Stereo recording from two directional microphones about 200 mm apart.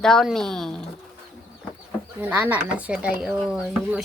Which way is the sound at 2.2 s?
10° right (ahead or behind).